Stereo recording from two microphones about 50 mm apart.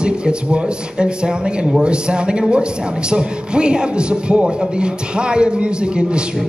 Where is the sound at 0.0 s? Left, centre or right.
Centre.